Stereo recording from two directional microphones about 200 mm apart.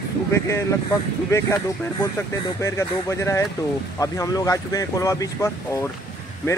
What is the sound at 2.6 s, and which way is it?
Speech, 15° left (ahead or behind).